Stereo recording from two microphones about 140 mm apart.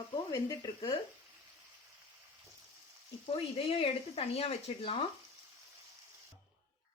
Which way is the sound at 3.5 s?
40° left (ahead or behind).